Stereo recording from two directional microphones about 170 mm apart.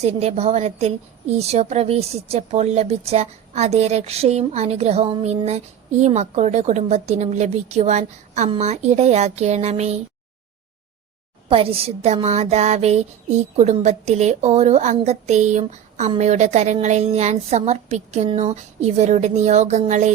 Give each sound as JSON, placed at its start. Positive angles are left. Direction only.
{"t": 0.0, "sound": "a woman's voice", "side_deg": -40}
{"t": 11.4, "sound": "a woman's voice", "side_deg": -35}